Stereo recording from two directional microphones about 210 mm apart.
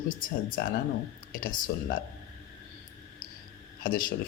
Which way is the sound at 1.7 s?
50° left (ahead or behind).